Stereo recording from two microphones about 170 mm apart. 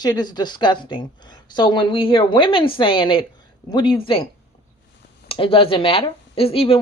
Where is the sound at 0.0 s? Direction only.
25° left (ahead or behind).